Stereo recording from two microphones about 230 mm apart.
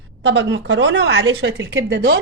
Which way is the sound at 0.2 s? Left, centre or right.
Right.